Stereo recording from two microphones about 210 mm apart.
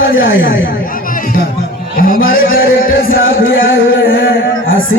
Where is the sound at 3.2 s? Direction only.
65° left (ahead or behind).